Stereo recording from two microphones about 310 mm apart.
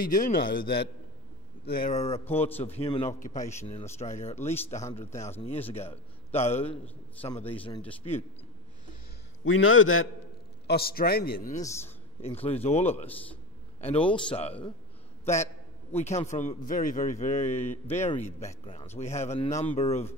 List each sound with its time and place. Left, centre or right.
0.0 s a man's voice: left
2.2 s a man's voice: centre
2.6 s a man's voice: centre
9.4 s a man's voice: left
10.7 s a man's voice: left
11.6 s a man's voice: centre
15.9 s a man's voice: left